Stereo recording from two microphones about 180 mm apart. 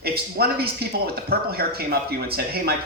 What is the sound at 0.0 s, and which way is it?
Speech, 60° right (ahead or behind).